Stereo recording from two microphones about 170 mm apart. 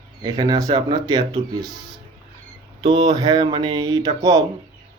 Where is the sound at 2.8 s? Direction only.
25° right (ahead or behind).